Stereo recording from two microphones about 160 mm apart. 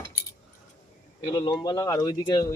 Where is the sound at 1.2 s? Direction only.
25° left (ahead or behind).